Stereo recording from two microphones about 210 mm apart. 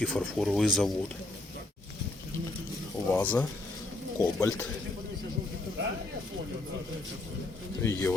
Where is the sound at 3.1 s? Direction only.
10° left (ahead or behind).